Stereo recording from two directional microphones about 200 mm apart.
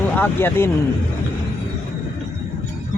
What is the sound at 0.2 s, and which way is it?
Speech, 10° left (ahead or behind).